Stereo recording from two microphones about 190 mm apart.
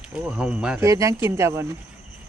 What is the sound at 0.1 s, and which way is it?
Speech, 5° right (ahead or behind).